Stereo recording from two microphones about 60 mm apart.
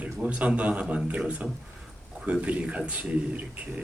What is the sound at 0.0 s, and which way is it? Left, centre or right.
Speech, right.